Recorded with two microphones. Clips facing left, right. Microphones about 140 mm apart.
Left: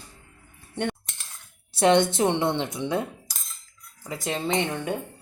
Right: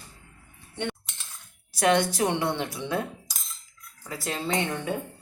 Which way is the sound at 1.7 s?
25° left (ahead or behind).